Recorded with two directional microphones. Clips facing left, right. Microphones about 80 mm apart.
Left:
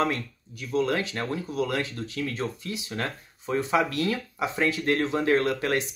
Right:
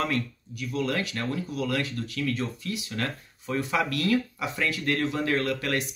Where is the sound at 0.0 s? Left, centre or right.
Left.